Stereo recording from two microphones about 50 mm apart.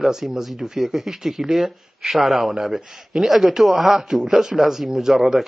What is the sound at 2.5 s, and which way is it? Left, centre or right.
Speech, centre.